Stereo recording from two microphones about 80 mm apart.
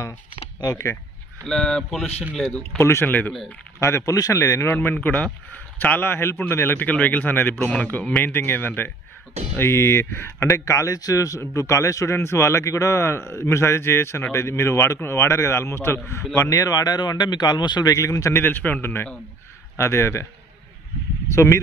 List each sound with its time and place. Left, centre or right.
1.4 s speech: centre
2.8 s speech: left
3.1 s a man's voice: left
3.8 s speech: left
4.7 s a man's voice: left
17.9 s speech: left
18.4 s a man's voice: left
21.3 s speech: left